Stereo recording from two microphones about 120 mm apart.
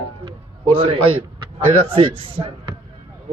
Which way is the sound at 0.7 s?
50° right (ahead or behind).